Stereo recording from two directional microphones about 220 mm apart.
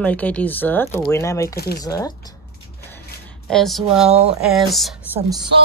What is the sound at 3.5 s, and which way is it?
Speech, centre (ahead or behind).